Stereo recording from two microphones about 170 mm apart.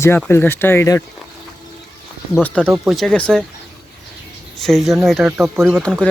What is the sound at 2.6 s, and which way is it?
Speech, 15° right (ahead or behind).